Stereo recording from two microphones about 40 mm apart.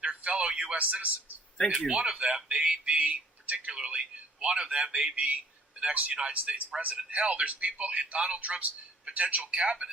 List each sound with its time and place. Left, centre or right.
0.0 s a sound: right
0.8 s speech: right
1.9 s a man's voice: right
6.1 s a man's voice: right